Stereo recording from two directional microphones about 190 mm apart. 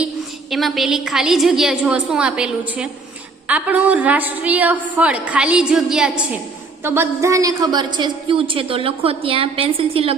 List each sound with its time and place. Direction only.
0.5 s a woman's voice: centre (ahead or behind); by 10.2 s 30° right (ahead or behind)